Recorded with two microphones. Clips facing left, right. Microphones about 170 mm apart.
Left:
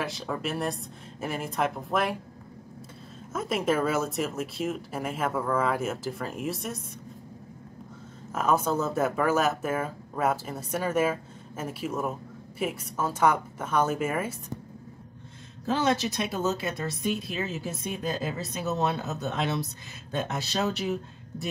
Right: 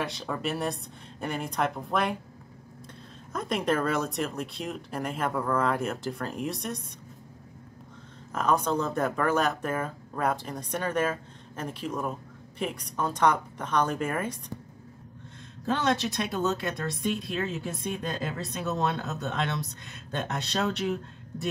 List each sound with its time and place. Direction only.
0.0 s speech: centre (ahead or behind)
3.3 s speech: 5° left (ahead or behind)
8.3 s speech: 5° left (ahead or behind)
15.7 s speech: centre (ahead or behind)